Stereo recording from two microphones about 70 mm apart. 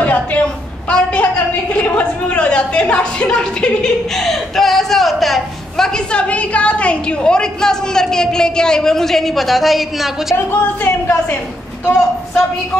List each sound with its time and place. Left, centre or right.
0.0 s a sound: left
0.8 s speech: centre
10.3 s speech: left